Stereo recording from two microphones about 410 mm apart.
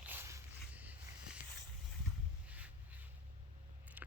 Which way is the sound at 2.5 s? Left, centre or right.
Centre.